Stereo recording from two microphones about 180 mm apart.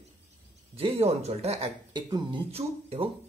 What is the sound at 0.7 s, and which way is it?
Speech, 35° right (ahead or behind).